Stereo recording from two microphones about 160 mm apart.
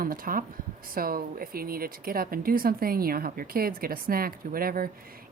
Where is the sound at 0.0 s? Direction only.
60° right (ahead or behind).